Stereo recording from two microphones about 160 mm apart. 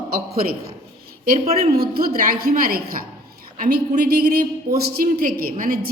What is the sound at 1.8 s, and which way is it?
Speech, 70° right (ahead or behind).